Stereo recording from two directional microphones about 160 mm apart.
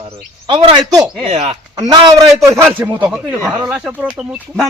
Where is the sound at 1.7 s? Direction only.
25° right (ahead or behind).